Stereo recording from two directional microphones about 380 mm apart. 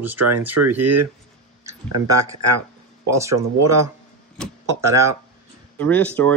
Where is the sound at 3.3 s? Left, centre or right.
Right.